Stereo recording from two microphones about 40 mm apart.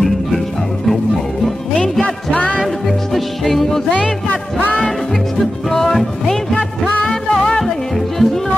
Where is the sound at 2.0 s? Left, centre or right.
Left.